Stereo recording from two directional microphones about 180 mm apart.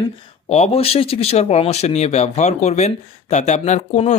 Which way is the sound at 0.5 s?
35° left (ahead or behind).